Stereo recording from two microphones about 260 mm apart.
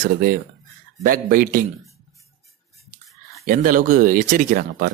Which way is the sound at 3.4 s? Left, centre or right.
Right.